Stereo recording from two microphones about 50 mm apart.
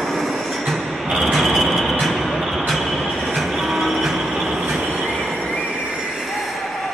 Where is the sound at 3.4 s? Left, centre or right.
Centre.